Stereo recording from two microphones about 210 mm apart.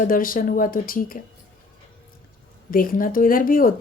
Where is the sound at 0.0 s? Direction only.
40° left (ahead or behind).